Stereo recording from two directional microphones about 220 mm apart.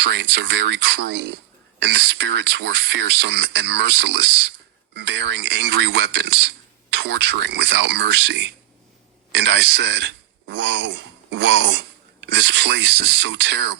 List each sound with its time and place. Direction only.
0.0 s speech: 50° right (ahead or behind)